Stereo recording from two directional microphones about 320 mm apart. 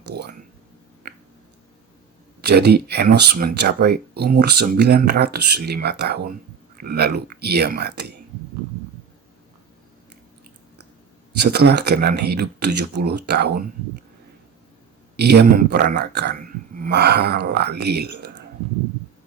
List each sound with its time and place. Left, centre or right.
0.1 s speech: right
2.4 s speech: right
11.4 s speech: right
15.1 s speech: right